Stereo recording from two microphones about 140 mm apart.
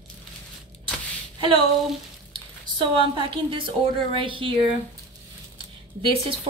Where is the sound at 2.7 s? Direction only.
35° right (ahead or behind).